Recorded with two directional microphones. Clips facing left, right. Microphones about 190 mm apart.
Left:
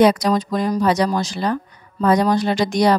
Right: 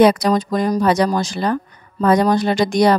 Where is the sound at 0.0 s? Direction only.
55° right (ahead or behind).